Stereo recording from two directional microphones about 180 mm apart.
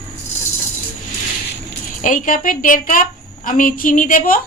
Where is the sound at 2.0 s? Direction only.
50° left (ahead or behind).